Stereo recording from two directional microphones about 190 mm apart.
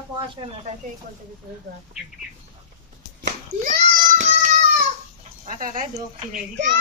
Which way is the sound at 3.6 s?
45° right (ahead or behind).